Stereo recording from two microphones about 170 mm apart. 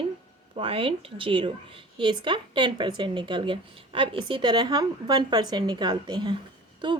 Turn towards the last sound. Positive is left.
turn(degrees=-25)  # may be behind; listen again after turning